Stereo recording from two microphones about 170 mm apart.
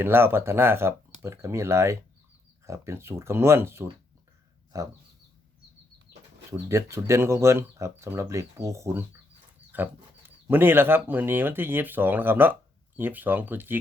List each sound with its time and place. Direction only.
0.0 s speech: 15° right (ahead or behind)
6.5 s speech: 15° right (ahead or behind)